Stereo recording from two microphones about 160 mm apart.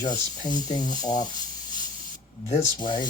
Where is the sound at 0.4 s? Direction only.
25° left (ahead or behind).